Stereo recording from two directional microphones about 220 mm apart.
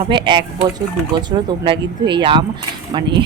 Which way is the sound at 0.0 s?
20° right (ahead or behind).